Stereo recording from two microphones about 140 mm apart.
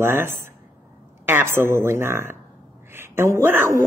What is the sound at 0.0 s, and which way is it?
Speech, 15° right (ahead or behind).